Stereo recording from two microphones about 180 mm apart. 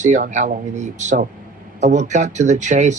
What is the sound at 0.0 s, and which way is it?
Speech, 40° right (ahead or behind).